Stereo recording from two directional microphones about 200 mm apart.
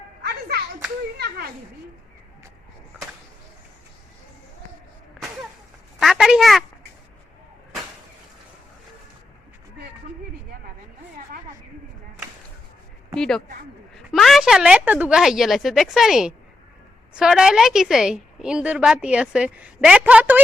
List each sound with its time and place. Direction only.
0.3 s hands: 50° right (ahead or behind)
6.0 s a sound: centre (ahead or behind)
13.1 s a woman's voice: 5° left (ahead or behind)